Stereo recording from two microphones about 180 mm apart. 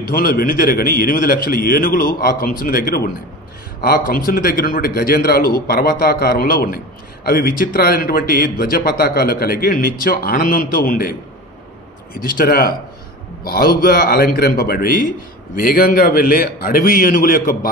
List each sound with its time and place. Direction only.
0.1 s a man's voice: 55° left (ahead or behind)